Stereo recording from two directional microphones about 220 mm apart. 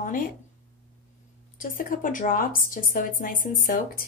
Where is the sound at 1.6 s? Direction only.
40° left (ahead or behind).